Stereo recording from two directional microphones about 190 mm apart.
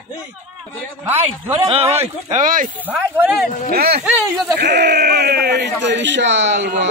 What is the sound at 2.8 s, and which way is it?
Speech, 10° right (ahead or behind).